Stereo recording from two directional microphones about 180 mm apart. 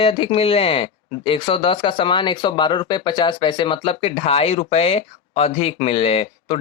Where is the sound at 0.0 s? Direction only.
30° left (ahead or behind).